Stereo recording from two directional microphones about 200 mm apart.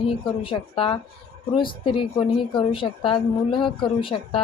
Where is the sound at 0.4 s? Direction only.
25° left (ahead or behind).